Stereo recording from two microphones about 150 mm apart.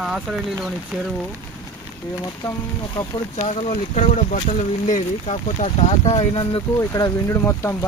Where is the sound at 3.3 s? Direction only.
45° left (ahead or behind).